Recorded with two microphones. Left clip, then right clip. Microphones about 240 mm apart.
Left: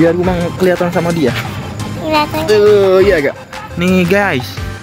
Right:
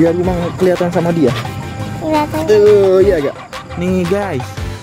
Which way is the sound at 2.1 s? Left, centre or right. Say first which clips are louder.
Left 1 dB; right.